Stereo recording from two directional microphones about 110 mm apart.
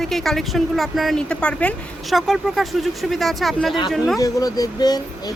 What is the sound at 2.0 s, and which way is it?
Speech, centre (ahead or behind).